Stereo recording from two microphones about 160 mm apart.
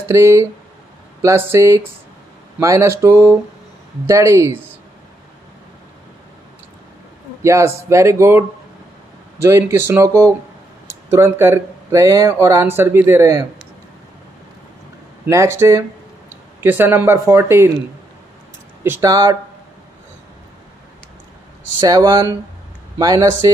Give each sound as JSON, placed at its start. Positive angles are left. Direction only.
{"t": 0.1, "sound": "speech", "side_deg": -15}
{"t": 7.4, "sound": "speech", "side_deg": -20}
{"t": 15.2, "sound": "speech", "side_deg": -15}
{"t": 18.9, "sound": "speech", "side_deg": -20}
{"t": 21.8, "sound": "speech", "side_deg": -25}